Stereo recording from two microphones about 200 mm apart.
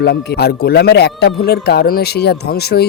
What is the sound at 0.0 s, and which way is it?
Speech, 55° left (ahead or behind).